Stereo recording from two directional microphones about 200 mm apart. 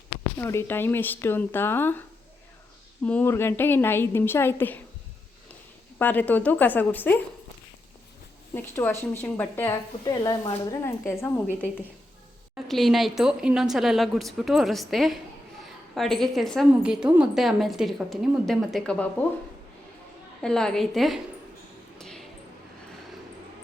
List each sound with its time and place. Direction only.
0.3 s speech: 10° left (ahead or behind)
6.0 s speech: 10° left (ahead or behind)
8.5 s speech: 10° left (ahead or behind)
12.6 s a woman's voice: centre (ahead or behind)
20.4 s a woman's voice: 5° left (ahead or behind)
21.9 s a sound: centre (ahead or behind)